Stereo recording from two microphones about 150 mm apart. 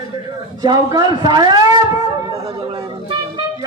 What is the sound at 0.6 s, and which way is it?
Speech, 25° right (ahead or behind).